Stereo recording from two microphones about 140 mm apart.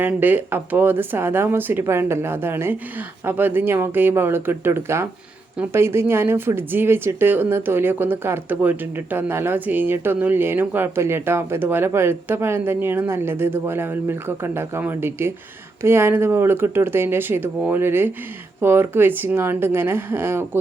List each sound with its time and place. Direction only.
0.0 s speech: 15° right (ahead or behind)